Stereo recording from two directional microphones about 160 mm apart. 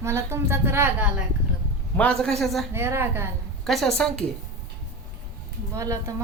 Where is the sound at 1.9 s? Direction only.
5° left (ahead or behind).